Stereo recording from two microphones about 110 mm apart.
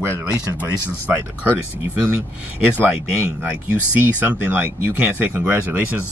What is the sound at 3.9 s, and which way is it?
Speech, 15° right (ahead or behind).